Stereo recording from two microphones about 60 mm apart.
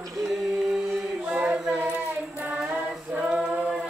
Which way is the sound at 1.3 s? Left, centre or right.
Centre.